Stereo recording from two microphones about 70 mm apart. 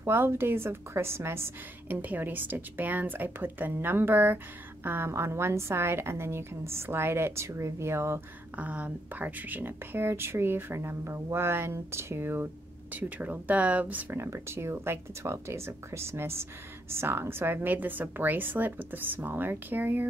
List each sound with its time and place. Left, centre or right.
0.0 s a woman's voice: right
8.5 s a woman's voice: right
14.1 s a woman's voice: right